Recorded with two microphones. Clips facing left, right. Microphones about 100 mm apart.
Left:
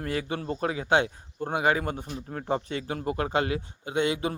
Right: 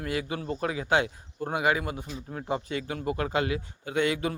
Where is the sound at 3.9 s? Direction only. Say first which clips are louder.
Even; 25° left (ahead or behind).